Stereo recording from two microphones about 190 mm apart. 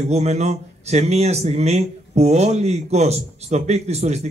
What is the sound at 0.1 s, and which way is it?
Speech, 35° right (ahead or behind).